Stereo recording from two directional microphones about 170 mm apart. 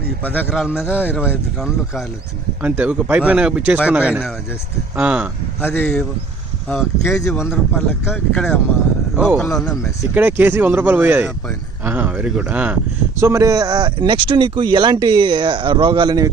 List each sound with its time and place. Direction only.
0.3 s speech: 10° left (ahead or behind)
0.5 s speech: centre (ahead or behind)
0.9 s speech: 10° left (ahead or behind)
1.2 s speech: 5° right (ahead or behind)
5.6 s speech: 10° left (ahead or behind); by 16.3 s 25° right (ahead or behind)